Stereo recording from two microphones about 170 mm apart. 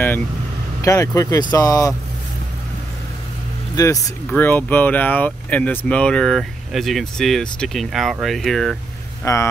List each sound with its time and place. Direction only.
0.8 s speech: 20° left (ahead or behind)
3.7 s speech: 20° left (ahead or behind); by 8.7 s centre (ahead or behind)
9.2 s speech: 15° left (ahead or behind)